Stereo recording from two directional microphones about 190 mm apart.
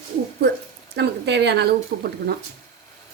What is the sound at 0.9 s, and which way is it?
Speech, 60° right (ahead or behind).